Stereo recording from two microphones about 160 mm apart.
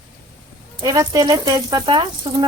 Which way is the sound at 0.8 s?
25° right (ahead or behind).